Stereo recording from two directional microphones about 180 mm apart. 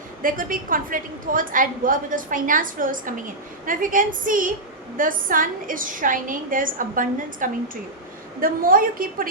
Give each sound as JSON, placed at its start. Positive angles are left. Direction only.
{"t": 0.2, "sound": "a woman's voice", "side_deg": -50}